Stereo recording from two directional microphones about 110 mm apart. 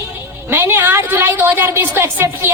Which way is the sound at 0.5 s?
20° right (ahead or behind).